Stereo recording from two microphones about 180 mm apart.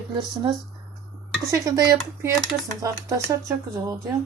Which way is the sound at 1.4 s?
20° right (ahead or behind).